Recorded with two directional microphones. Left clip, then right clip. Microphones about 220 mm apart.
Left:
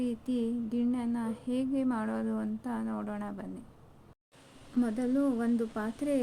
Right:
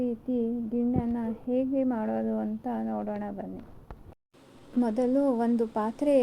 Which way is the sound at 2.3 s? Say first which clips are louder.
Right 4 dB; 55° left (ahead or behind).